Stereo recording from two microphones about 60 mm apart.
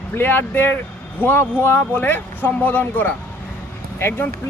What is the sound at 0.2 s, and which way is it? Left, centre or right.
Speech, left.